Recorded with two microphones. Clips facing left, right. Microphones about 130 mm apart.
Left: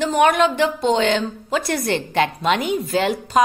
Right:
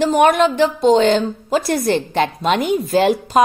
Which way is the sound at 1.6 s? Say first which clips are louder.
Right 4 dB; 25° right (ahead or behind).